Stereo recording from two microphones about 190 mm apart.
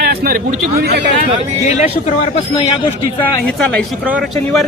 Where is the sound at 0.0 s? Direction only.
55° right (ahead or behind).